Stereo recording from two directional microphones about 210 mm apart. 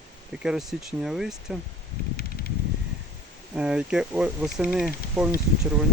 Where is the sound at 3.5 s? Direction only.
5° right (ahead or behind).